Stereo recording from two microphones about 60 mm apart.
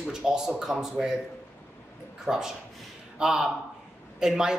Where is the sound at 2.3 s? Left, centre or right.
Centre.